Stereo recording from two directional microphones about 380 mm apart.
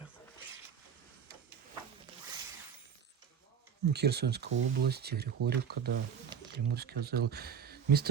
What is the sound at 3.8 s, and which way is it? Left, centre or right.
Speech, right.